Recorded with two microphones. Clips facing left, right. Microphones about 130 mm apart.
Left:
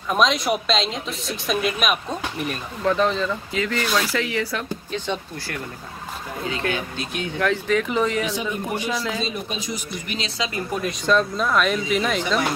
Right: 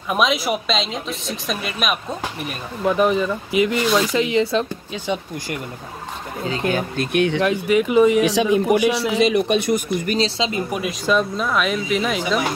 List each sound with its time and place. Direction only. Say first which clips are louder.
0.1 s speech: even; 5° right (ahead or behind)
2.8 s speech: right 3 dB; 10° right (ahead or behind)
4.9 s speech: right 3 dB; 10° right (ahead or behind)
6.7 s speech: right 7 dB; 50° right (ahead or behind); by 7.4 s 70° right (ahead or behind)
7.4 s speech: right 3 dB; 10° right (ahead or behind)
8.2 s speech: right 9 dB; 90° right
9.1 s speech: right 11 dB; 75° right (ahead or behind); by 10.1 s 55° right (ahead or behind)
10.1 s speech: right 4 dB; 30° right (ahead or behind)
10.7 s speech: left 3 dB; 5° right (ahead or behind)